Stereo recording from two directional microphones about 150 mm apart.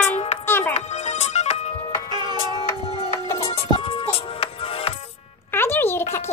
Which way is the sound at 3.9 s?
40° left (ahead or behind).